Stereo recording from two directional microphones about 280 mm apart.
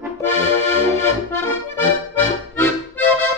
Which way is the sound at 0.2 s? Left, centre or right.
Centre.